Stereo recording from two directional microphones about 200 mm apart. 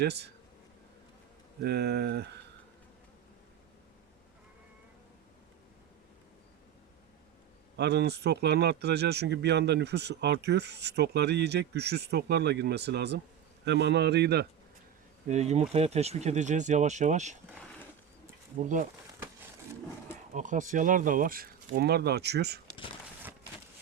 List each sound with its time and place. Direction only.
0.0 s a man's voice: 55° right (ahead or behind)
1.6 s a man's voice: 55° right (ahead or behind)
7.8 s a man's voice: 55° right (ahead or behind)
15.3 s speech: 35° right (ahead or behind)
18.6 s speech: 40° right (ahead or behind)
20.3 s speech: 40° right (ahead or behind); by 22.6 s 55° right (ahead or behind)